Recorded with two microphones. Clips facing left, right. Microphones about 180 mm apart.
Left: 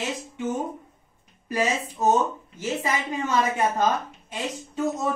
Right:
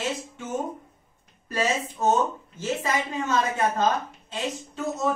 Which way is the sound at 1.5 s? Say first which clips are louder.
Left 1 dB; 15° left (ahead or behind).